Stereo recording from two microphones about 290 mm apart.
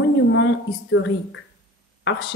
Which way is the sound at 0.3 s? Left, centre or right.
Left.